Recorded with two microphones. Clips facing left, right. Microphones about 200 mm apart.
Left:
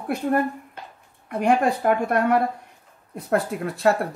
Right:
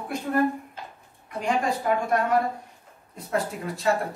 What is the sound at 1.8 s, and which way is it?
Speech, 60° left (ahead or behind).